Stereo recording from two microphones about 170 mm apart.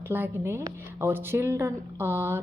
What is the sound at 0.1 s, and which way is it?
A woman's voice, 15° right (ahead or behind).